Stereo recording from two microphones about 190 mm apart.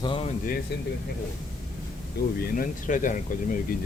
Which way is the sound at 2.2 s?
55° left (ahead or behind).